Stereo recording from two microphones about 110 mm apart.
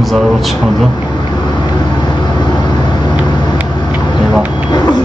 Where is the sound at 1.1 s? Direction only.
40° left (ahead or behind).